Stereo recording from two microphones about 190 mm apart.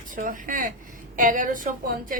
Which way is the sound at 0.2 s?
45° right (ahead or behind).